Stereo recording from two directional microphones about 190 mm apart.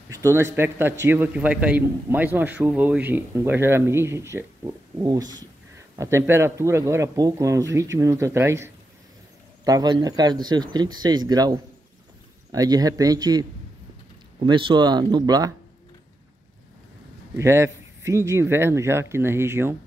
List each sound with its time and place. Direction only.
0.1 s a man's voice: 15° right (ahead or behind)
17.4 s a man's voice: 15° right (ahead or behind)